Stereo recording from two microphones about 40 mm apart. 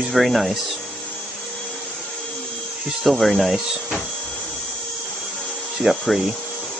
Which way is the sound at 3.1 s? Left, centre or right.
Centre.